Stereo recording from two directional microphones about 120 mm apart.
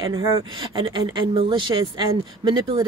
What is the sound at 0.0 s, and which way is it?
Speech, 40° right (ahead or behind).